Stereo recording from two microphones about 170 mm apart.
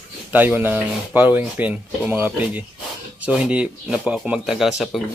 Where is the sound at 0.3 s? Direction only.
10° right (ahead or behind).